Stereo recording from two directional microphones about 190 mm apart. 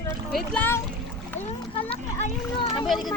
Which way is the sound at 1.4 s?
30° left (ahead or behind).